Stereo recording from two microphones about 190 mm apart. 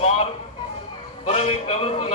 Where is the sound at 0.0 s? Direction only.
30° left (ahead or behind).